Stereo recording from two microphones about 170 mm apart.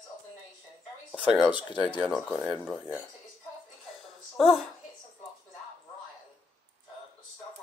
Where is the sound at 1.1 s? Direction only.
5° right (ahead or behind).